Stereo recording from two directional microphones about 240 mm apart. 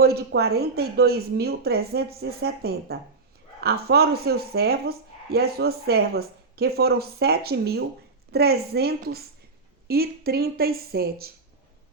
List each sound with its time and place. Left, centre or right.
0.0 s speech: right